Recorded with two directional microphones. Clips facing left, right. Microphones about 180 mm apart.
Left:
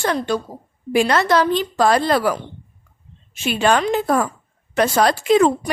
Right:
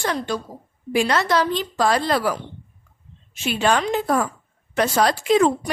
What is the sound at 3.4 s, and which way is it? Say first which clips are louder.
A woman's voice: left 3 dB; 60° left (ahead or behind).